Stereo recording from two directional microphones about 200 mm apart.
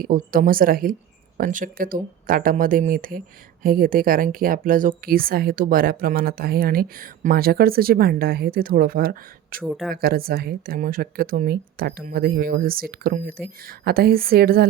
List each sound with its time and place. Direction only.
0.0 s speech: 45° right (ahead or behind)
9.6 s a woman's voice: centre (ahead or behind)
9.9 s speech: 50° right (ahead or behind)